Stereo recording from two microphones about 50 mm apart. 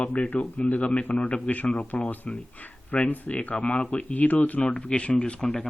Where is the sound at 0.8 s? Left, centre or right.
Left.